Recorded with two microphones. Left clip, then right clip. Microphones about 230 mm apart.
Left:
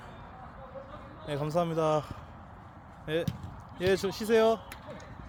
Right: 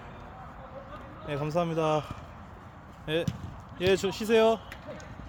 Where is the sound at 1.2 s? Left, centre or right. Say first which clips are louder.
Even; centre.